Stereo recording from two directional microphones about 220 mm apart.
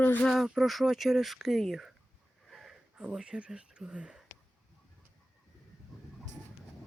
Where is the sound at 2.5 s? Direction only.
Centre (ahead or behind).